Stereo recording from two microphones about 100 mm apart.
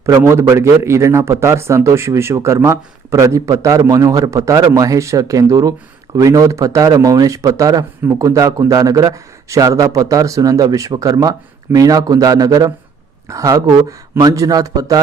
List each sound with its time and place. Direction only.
0.0 s a man's voice: 25° right (ahead or behind)